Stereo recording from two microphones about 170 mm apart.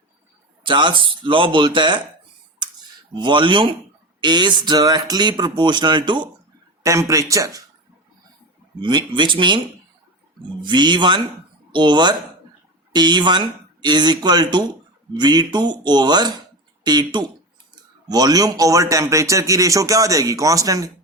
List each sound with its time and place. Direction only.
0.6 s speech: 30° right (ahead or behind)
3.2 s speech: 30° right (ahead or behind)
8.8 s speech: 25° right (ahead or behind)